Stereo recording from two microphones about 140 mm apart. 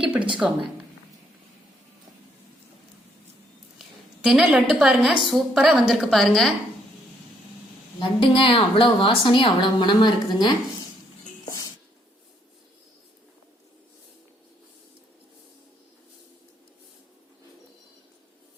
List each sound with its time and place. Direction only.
0.0 s speech: 10° right (ahead or behind)
3.8 s a sound: 5° right (ahead or behind)
4.7 s a woman's voice: 5° right (ahead or behind)
8.2 s a woman's voice: 40° left (ahead or behind)